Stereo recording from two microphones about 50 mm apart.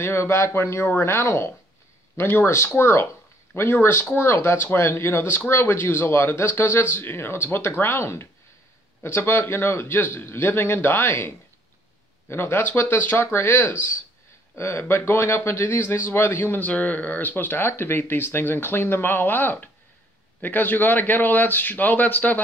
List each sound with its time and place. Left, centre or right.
0.0 s speech: left
14.6 s speech: left
16.6 s a man's voice: left